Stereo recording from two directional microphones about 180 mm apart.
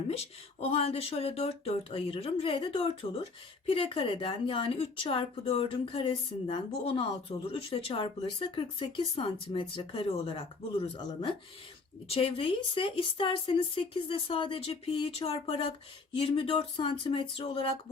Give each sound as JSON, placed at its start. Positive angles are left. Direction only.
{"t": 0.6, "sound": "a woman's voice", "side_deg": 35}